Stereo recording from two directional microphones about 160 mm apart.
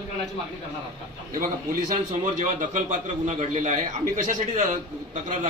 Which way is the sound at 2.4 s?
50° right (ahead or behind).